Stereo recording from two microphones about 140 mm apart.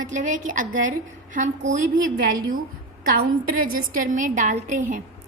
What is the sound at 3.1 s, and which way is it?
A woman's voice, 80° right.